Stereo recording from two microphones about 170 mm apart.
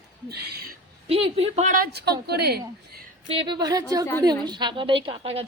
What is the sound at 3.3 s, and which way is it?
A woman's voice, 30° right (ahead or behind).